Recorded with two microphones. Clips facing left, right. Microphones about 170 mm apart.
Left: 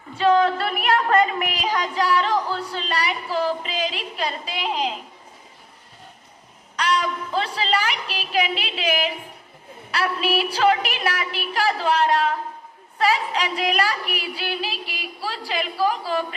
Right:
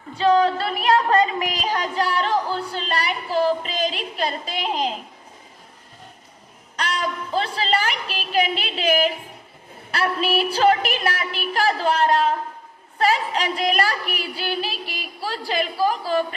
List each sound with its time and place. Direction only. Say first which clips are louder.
0.3 s a woman's voice: even; 35° right (ahead or behind)
6.7 s a woman's voice: left 3 dB; 45° right (ahead or behind)